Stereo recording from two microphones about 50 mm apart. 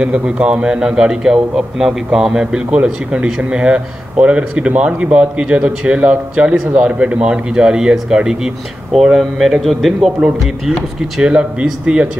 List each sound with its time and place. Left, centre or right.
0.0 s a man's voice: right
2.7 s a man's voice: right; by 10.1 s centre
11.0 s a man's voice: centre